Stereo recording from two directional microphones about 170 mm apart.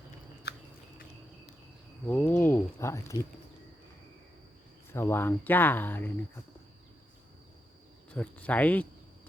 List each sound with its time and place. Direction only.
0.5 s biting: 70° left (ahead or behind)
2.0 s speech: 10° left (ahead or behind)
4.9 s speech: 15° left (ahead or behind)
8.1 s speech: 10° left (ahead or behind)